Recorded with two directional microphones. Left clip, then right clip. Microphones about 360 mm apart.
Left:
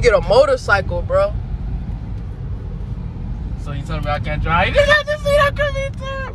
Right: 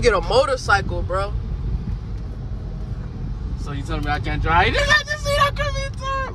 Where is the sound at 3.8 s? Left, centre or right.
Right.